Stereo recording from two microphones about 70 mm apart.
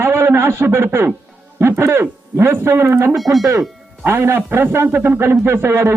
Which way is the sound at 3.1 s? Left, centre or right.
Centre.